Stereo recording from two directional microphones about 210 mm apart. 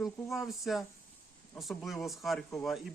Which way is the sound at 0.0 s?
Centre (ahead or behind).